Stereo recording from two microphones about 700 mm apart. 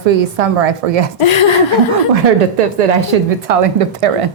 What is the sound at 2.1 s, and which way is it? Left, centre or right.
A woman's voice, right.